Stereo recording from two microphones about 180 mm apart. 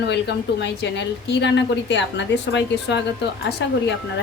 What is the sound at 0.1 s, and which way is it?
A woman's voice, 75° left (ahead or behind).